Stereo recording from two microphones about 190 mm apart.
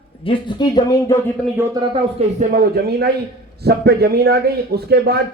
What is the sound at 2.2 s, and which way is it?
A man's voice, 45° right (ahead or behind).